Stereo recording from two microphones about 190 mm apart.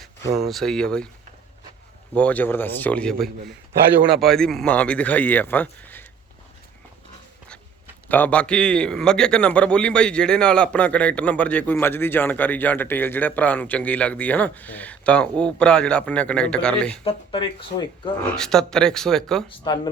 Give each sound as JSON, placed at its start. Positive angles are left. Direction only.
{"t": 0.3, "sound": "speech", "side_deg": 0}
{"t": 2.1, "sound": "a man's voice", "side_deg": 10}
{"t": 8.0, "sound": "a man's voice", "side_deg": 10}
{"t": 17.0, "sound": "speech", "side_deg": 25}
{"t": 18.3, "sound": "speech", "side_deg": 5}
{"t": 19.5, "sound": "speech", "side_deg": 25}